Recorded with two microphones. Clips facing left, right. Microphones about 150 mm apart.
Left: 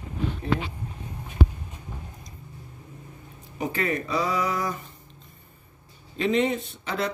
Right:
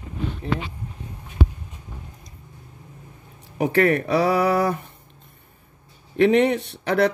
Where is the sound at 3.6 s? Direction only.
70° right (ahead or behind).